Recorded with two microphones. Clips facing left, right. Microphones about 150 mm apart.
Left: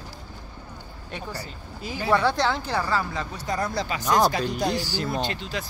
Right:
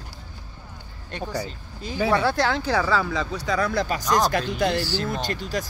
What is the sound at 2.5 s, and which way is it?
Speech, 90° right.